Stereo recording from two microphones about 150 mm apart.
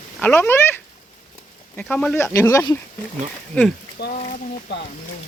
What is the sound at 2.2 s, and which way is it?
Speech, 20° left (ahead or behind).